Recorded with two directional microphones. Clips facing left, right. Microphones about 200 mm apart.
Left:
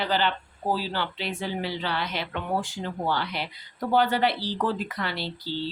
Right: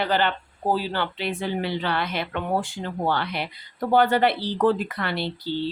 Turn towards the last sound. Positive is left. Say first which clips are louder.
# right 4 dB
turn(degrees=-55)  # may be behind; listen again after turning